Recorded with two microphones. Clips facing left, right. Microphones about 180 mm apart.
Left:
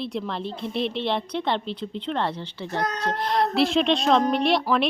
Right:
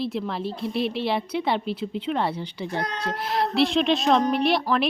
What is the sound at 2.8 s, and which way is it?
Speech, 40° left (ahead or behind).